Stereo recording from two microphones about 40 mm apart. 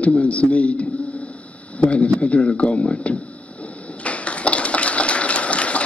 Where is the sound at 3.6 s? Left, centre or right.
Left.